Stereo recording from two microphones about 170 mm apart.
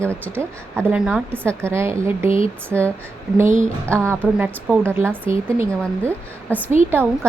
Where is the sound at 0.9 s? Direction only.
5° right (ahead or behind).